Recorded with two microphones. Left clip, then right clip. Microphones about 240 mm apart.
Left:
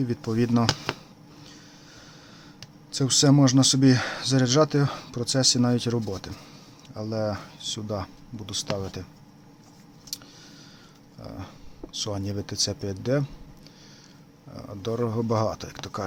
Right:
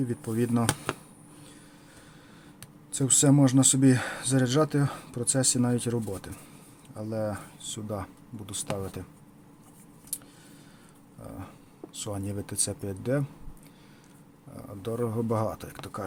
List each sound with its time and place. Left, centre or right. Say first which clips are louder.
0.0 s speech: left 3 dB; centre
2.6 s speech: left 3 dB; centre
11.2 s speech: left 3 dB; centre
14.5 s speech: left 4 dB; centre